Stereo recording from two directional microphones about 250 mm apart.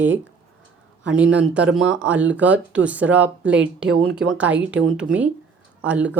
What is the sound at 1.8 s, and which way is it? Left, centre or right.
Speech, right.